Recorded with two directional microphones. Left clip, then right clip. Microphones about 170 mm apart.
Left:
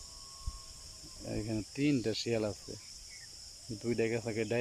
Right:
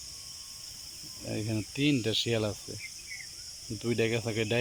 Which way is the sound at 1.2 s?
Centre (ahead or behind).